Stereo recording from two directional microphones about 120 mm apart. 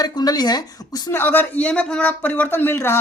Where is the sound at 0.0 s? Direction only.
35° left (ahead or behind).